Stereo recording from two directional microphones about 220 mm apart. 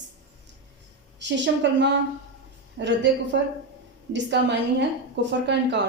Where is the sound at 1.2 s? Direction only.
50° right (ahead or behind).